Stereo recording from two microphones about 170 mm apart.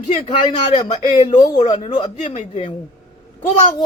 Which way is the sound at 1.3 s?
45° left (ahead or behind).